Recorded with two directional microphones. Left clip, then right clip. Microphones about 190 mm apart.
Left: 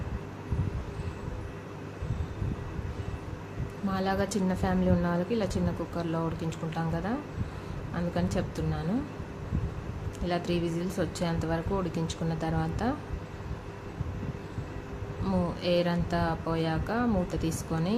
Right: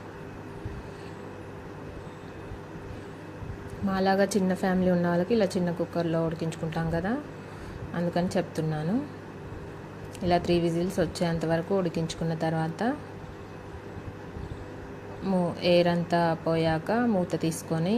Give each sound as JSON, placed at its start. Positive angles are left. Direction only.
{"t": 3.8, "sound": "speech", "side_deg": -20}
{"t": 10.2, "sound": "speech", "side_deg": -20}
{"t": 15.2, "sound": "speech", "side_deg": -15}